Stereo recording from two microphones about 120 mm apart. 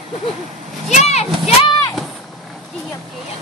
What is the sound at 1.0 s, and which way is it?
Speech, 60° left (ahead or behind).